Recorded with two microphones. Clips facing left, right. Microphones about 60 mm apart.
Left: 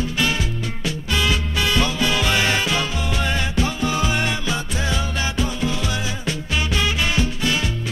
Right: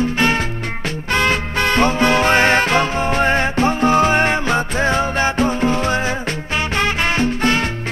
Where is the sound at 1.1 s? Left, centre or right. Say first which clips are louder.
Right 5 dB; right.